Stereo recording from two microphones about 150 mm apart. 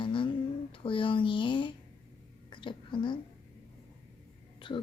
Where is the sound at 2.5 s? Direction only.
35° left (ahead or behind).